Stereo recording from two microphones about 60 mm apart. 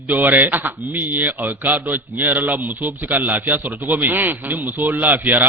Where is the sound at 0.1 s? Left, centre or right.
Right.